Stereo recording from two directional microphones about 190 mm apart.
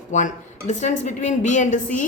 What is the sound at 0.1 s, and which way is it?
A woman's voice, 40° left (ahead or behind).